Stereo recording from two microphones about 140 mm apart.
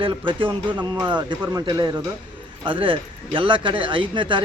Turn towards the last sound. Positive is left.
turn(degrees=-35)  # may be behind; listen again after turning